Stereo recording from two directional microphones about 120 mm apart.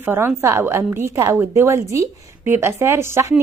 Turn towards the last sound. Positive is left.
turn(degrees=-20)  # may be behind; listen again after turning